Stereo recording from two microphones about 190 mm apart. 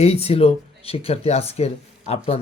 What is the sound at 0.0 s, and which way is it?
Speech, 35° left (ahead or behind).